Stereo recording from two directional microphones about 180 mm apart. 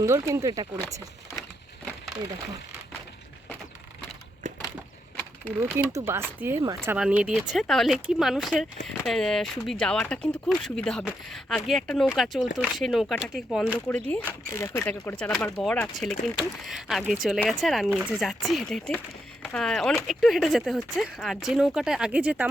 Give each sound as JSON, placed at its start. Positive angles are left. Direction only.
{"t": 0.0, "sound": "speech", "side_deg": -15}
{"t": 5.5, "sound": "speech", "side_deg": -15}
{"t": 6.9, "sound": "speech", "side_deg": -5}